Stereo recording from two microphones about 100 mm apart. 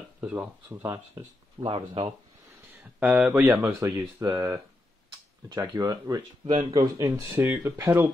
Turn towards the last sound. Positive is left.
turn(degrees=-30)  # may be behind; listen again after turning